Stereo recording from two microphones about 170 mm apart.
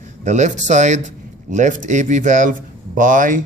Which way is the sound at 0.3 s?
45° right (ahead or behind).